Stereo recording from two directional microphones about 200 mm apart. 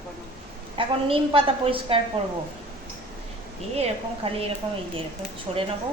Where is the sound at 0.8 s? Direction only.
25° right (ahead or behind).